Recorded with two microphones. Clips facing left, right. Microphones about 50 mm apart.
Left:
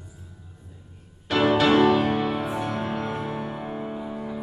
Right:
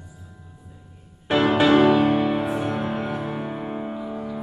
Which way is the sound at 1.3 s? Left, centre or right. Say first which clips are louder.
Right 2 dB; centre.